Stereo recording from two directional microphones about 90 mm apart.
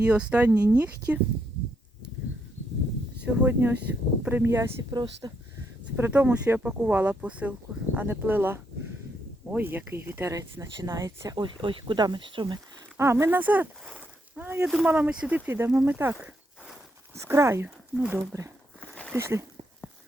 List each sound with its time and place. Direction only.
0.0 s speech: 10° right (ahead or behind)
0.5 s speech: 40° right (ahead or behind)
0.8 s speech: 15° right (ahead or behind)
3.2 s speech: 20° right (ahead or behind)
4.8 s speech: 45° right (ahead or behind)
6.1 s speech: 15° right (ahead or behind); by 11.3 s 35° right (ahead or behind)
11.3 s speech: 70° right (ahead or behind)
13.0 s speech: 30° right (ahead or behind)
13.4 s speech: 20° right (ahead or behind)
13.9 s a sound: 20° right (ahead or behind)
14.8 s speech: 15° right (ahead or behind)
15.4 s speech: 30° right (ahead or behind)
17.9 s speech: 10° right (ahead or behind)
19.1 s speech: 30° right (ahead or behind)